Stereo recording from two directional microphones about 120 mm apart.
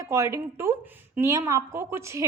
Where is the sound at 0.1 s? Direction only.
25° right (ahead or behind).